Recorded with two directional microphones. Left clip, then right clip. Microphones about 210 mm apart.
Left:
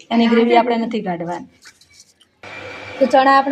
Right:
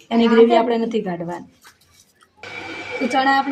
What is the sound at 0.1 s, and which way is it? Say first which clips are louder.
A woman's voice: even; centre (ahead or behind).